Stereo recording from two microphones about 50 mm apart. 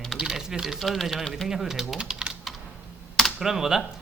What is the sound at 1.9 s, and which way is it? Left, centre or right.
Speech, right.